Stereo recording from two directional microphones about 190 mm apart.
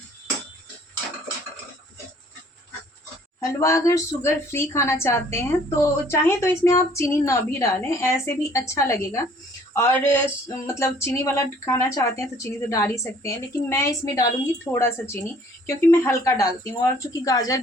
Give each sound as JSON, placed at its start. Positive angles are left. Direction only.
{"t": 3.4, "sound": "speech", "side_deg": 15}